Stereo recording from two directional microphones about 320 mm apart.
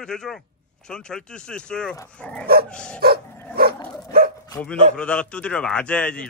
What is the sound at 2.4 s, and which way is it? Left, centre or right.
Dog, right.